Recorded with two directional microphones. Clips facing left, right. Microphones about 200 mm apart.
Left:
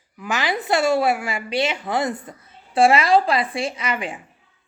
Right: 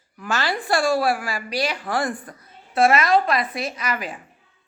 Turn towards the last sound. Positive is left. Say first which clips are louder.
# left 2 dB
turn(degrees=25)  # may be behind; listen again after turning